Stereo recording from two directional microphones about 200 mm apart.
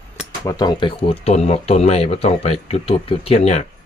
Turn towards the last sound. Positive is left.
turn(degrees=35)  # may be behind; listen again after turning